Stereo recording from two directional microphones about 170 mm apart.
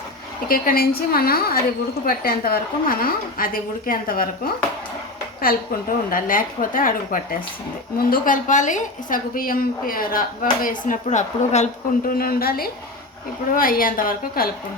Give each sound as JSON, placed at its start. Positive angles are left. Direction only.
{"t": 0.4, "sound": "a woman's voice", "side_deg": 60}
{"t": 5.5, "sound": "a woman's voice", "side_deg": 60}
{"t": 12.1, "sound": "a woman's voice", "side_deg": 60}